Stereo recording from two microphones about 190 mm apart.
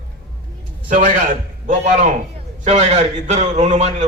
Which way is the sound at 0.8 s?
45° right (ahead or behind).